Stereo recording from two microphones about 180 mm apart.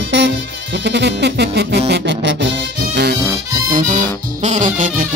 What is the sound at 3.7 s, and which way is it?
Music, 45° right (ahead or behind).